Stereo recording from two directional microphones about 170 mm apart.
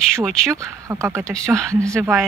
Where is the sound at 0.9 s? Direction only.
15° right (ahead or behind).